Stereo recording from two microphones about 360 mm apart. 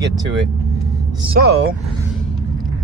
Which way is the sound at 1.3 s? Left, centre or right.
Right.